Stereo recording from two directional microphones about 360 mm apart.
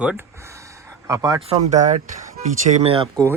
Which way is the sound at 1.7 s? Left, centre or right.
Centre.